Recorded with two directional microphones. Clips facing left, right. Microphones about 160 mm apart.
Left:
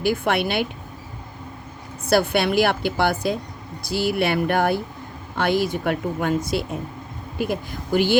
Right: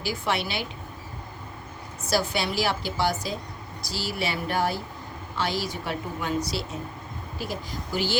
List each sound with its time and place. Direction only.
0.0 s speech: 55° left (ahead or behind)
2.0 s speech: 55° left (ahead or behind)